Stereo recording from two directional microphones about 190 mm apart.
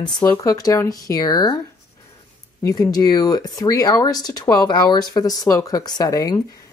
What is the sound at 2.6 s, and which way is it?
Speech, 20° left (ahead or behind).